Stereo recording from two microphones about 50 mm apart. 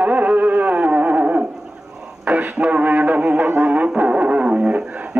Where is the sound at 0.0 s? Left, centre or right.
Right.